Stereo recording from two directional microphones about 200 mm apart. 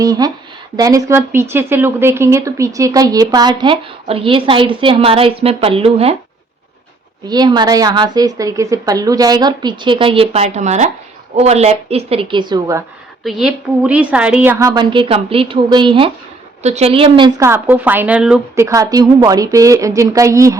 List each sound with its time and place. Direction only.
0.0 s a woman's voice: 20° right (ahead or behind)
7.3 s a woman's voice: 20° right (ahead or behind)
13.2 s speech: centre (ahead or behind)
18.6 s speech: 15° right (ahead or behind)